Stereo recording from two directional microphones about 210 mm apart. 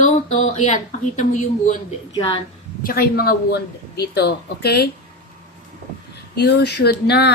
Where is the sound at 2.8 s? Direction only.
45° left (ahead or behind).